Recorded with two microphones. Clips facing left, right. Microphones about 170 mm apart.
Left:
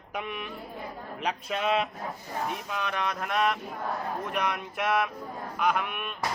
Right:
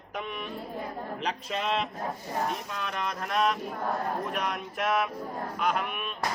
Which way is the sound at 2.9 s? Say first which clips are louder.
Even; centre (ahead or behind).